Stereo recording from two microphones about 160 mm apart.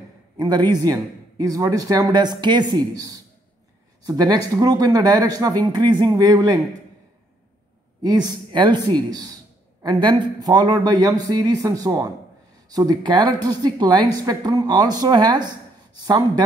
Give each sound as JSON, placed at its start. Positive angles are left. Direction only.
{"t": 0.4, "sound": "a man's voice", "side_deg": -25}
{"t": 8.0, "sound": "a man's voice", "side_deg": -25}